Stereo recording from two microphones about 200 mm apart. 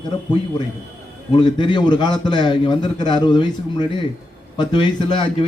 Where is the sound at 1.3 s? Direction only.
25° left (ahead or behind).